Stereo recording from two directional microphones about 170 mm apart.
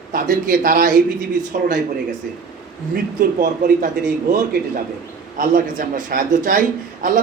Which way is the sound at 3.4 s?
50° right (ahead or behind).